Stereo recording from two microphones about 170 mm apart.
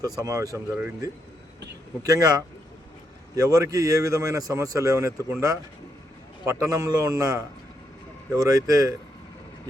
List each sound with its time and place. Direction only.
0.0 s speech: 20° right (ahead or behind)
3.3 s speech: 20° right (ahead or behind)